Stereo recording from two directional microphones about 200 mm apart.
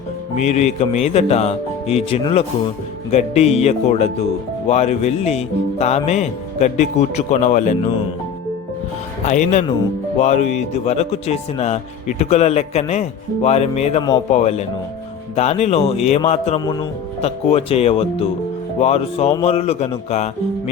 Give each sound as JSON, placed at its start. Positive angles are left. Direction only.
{"t": 0.3, "sound": "speech", "side_deg": 35}
{"t": 9.2, "sound": "speech", "side_deg": 35}